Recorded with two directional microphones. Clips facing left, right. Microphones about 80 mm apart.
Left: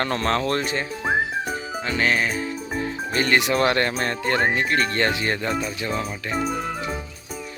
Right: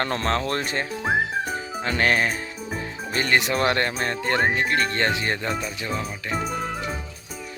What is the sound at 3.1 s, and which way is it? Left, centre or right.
Speech, right.